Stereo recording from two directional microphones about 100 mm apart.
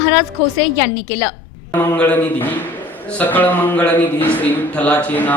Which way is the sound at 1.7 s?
15° left (ahead or behind).